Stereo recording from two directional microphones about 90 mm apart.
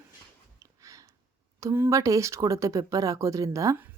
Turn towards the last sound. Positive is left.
turn(degrees=-35)  # may be behind; listen again after turning